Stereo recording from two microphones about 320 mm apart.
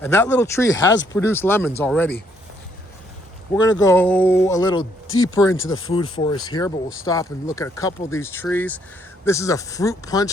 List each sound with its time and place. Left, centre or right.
0.0 s speech: centre
3.8 s speech: centre
5.0 s speech: left
5.3 s speech: centre
5.5 s speech: left
5.9 s speech: centre